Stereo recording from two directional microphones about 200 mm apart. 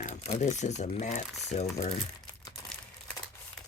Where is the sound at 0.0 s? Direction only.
35° left (ahead or behind).